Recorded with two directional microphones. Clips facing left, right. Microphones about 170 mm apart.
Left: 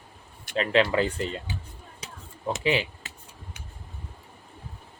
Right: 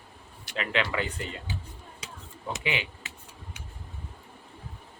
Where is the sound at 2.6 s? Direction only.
35° left (ahead or behind).